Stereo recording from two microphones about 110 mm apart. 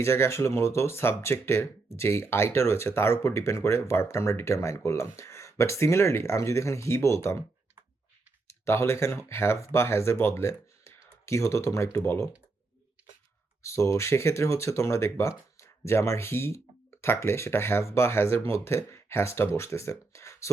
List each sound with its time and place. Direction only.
0.0 s speech: 25° left (ahead or behind)
8.4 s speech: 25° left (ahead or behind)
13.6 s speech: 25° left (ahead or behind)